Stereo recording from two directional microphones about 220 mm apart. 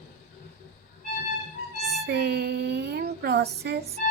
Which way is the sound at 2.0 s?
50° right (ahead or behind).